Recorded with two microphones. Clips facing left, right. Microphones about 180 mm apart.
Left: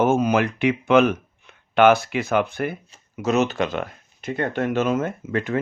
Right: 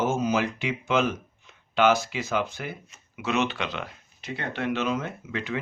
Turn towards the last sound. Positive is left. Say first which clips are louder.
# left 7 dB
turn(degrees=50)  # may be behind; listen again after turning